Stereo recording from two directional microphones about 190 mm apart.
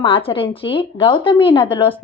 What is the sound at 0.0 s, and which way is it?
Speech, 30° left (ahead or behind).